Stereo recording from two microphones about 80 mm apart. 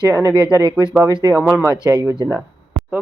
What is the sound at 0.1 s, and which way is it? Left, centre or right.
Speech, right.